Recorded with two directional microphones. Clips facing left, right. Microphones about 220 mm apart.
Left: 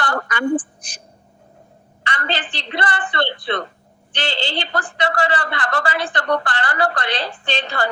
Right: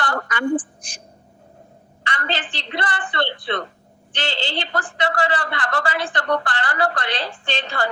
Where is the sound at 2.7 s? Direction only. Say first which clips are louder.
Left 3 dB; 70° left (ahead or behind).